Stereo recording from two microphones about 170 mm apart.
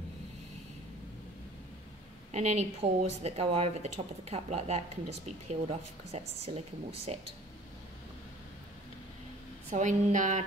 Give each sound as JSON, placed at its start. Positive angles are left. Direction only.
{"t": 2.3, "sound": "speech", "side_deg": -40}
{"t": 9.7, "sound": "a woman's voice", "side_deg": -45}